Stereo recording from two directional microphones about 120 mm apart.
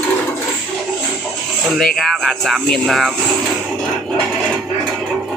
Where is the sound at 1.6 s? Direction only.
Centre (ahead or behind).